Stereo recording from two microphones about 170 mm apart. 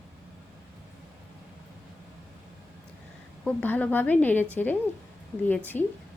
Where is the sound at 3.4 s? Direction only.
10° left (ahead or behind).